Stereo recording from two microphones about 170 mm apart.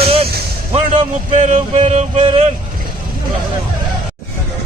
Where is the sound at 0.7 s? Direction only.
40° right (ahead or behind).